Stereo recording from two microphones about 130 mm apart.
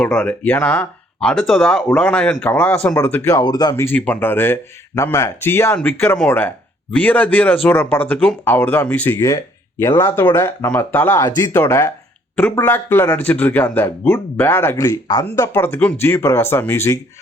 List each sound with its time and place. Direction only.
0.0 s speech: 5° left (ahead or behind)
3.2 s speech: 30° left (ahead or behind)